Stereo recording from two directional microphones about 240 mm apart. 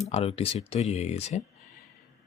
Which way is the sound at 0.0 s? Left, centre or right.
Left.